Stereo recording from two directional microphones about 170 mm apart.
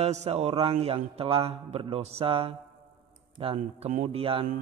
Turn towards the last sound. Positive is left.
turn(degrees=-35)  # may be behind; listen again after turning